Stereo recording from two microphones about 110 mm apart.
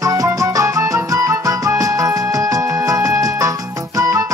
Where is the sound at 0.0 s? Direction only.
35° right (ahead or behind).